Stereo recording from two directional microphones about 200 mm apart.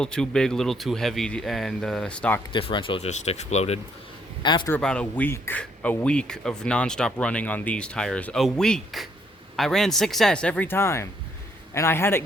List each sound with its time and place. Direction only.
0.0 s speech: 5° left (ahead or behind)
2.5 s speech: 25° left (ahead or behind)
4.4 s speech: 25° left (ahead or behind)
4.7 s a man's voice: 5° left (ahead or behind)